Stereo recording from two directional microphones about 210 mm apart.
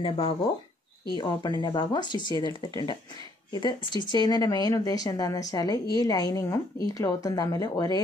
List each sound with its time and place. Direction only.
0.0 s speech: 25° left (ahead or behind)